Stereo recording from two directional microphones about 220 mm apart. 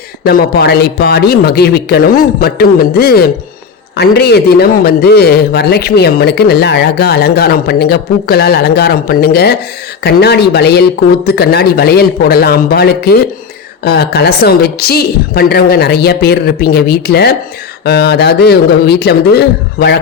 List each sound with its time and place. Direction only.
0.3 s a man's voice: 45° left (ahead or behind)